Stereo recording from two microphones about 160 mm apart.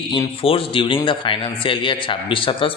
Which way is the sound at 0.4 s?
35° left (ahead or behind).